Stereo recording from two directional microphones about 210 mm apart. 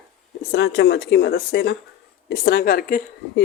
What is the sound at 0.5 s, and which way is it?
Speech, 55° left (ahead or behind).